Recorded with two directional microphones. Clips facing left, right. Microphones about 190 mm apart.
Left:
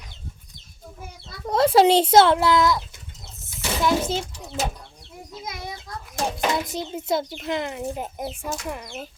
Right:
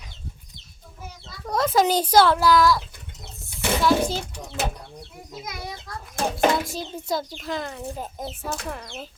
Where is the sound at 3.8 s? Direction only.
20° left (ahead or behind).